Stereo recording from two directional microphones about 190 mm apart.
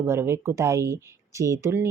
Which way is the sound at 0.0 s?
15° right (ahead or behind).